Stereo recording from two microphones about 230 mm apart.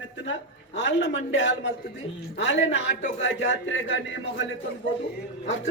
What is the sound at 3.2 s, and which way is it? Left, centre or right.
Speech, left.